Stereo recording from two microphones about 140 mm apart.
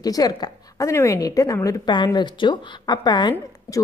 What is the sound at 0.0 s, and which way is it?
A woman's voice, 25° left (ahead or behind).